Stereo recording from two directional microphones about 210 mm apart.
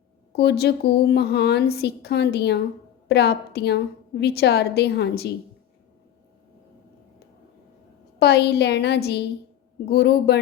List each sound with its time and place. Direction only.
0.3 s a woman's voice: 50° left (ahead or behind)
8.2 s a woman's voice: 50° left (ahead or behind)